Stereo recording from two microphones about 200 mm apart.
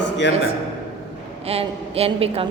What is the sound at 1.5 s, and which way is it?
A woman's voice, 30° right (ahead or behind).